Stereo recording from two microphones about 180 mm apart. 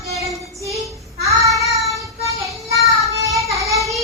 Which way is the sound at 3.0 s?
20° right (ahead or behind).